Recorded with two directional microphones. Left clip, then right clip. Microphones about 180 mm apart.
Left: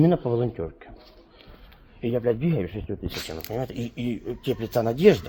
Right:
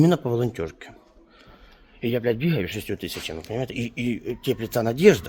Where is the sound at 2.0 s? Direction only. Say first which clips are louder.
Even; 30° right (ahead or behind).